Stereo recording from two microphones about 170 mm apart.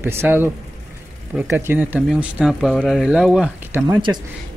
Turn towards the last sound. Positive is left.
turn(degrees=-10)  # may be behind; listen again after turning